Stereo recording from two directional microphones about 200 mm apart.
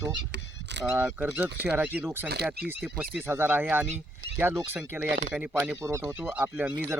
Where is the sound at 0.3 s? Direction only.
60° right (ahead or behind).